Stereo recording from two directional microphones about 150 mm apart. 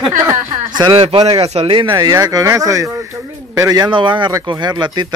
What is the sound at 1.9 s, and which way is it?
Speech, 25° right (ahead or behind).